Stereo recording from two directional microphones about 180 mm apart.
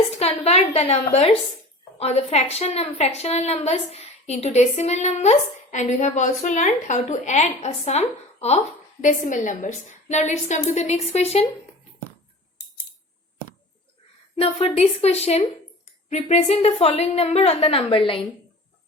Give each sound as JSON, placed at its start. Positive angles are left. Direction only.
{"t": 0.2, "sound": "a woman's voice", "side_deg": 35}
{"t": 14.6, "sound": "a woman's voice", "side_deg": 35}